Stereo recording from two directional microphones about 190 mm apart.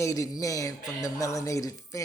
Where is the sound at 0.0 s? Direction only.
15° left (ahead or behind).